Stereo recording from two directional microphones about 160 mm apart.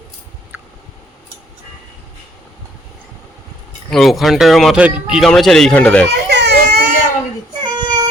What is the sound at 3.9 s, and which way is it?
Speech, centre (ahead or behind).